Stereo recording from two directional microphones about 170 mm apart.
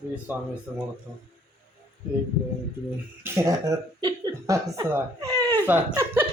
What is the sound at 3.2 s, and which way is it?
Speech, 15° right (ahead or behind).